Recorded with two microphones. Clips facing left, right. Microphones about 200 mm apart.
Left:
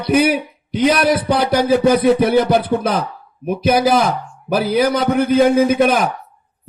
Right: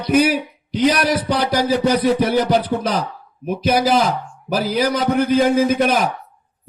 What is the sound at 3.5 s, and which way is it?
Speech, 55° left (ahead or behind).